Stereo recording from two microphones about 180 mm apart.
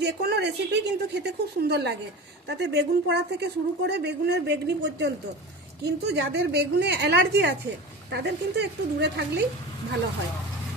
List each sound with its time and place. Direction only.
0.0 s speech: 65° right (ahead or behind)